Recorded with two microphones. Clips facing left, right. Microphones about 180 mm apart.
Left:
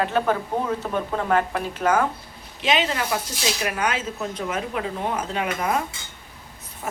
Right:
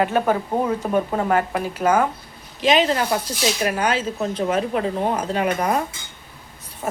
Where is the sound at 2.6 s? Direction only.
40° right (ahead or behind).